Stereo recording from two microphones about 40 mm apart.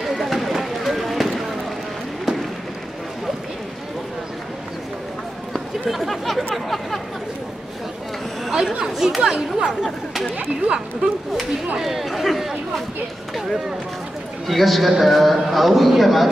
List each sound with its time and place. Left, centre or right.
0.0 s a sound: centre
5.5 s speech: centre
8.9 s speech: centre
11.8 s speech: centre
14.5 s speech: centre